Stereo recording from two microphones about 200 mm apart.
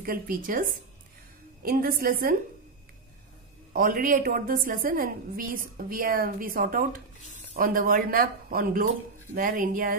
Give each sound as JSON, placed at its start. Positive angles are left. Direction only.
{"t": 0.0, "sound": "a woman's voice", "side_deg": -45}
{"t": 3.7, "sound": "a woman's voice", "side_deg": -45}